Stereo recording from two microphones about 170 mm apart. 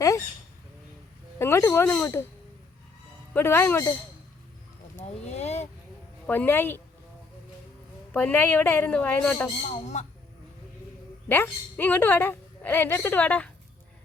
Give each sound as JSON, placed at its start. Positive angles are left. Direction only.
{"t": 1.4, "sound": "speech", "side_deg": 15}
{"t": 3.3, "sound": "a woman's voice", "side_deg": 15}
{"t": 5.0, "sound": "speech", "side_deg": 40}
{"t": 6.2, "sound": "a woman's voice", "side_deg": 10}
{"t": 8.1, "sound": "a woman's voice", "side_deg": 10}
{"t": 9.6, "sound": "speech", "side_deg": 40}
{"t": 11.3, "sound": "a woman's voice", "side_deg": 10}